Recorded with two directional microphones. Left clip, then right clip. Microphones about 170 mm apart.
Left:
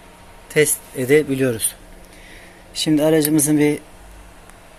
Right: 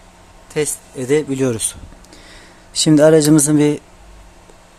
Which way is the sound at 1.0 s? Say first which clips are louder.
Left 1 dB; 15° right (ahead or behind).